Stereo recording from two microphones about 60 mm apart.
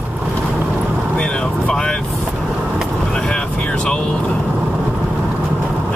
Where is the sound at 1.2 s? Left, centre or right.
Centre.